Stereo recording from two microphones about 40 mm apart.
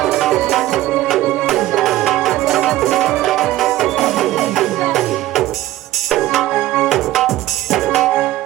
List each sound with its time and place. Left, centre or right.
0.0 s music: centre